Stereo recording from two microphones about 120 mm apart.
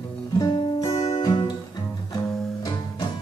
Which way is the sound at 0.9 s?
55° left (ahead or behind).